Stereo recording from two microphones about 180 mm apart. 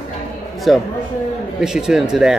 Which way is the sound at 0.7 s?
Centre (ahead or behind).